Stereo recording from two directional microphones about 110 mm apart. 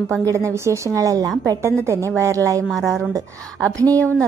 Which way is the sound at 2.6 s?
Centre (ahead or behind).